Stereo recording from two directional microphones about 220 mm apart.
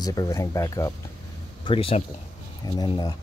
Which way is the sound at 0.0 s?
15° left (ahead or behind).